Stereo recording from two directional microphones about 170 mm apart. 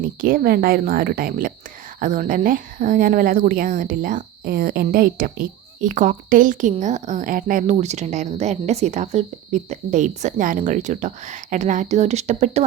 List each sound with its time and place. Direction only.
0.0 s speech: 55° right (ahead or behind)